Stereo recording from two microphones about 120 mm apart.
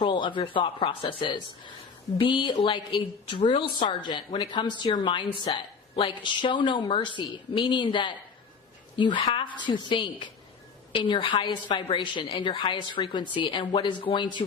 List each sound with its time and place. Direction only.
0.0 s a woman's voice: 45° left (ahead or behind)